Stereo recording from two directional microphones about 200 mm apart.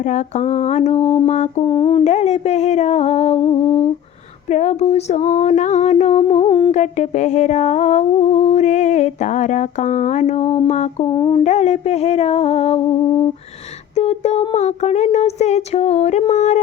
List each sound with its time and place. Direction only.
0.1 s humming: 35° left (ahead or behind)
6.7 s humming: 35° left (ahead or behind)
11.1 s a sound: 20° left (ahead or behind)
11.4 s humming: 35° left (ahead or behind)